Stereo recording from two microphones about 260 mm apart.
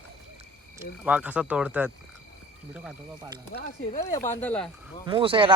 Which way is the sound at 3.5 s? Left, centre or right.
Left.